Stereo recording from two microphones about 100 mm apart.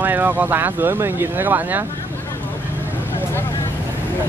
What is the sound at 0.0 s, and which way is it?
Speech, 20° right (ahead or behind).